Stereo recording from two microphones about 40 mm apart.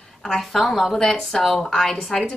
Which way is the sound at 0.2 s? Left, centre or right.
Centre.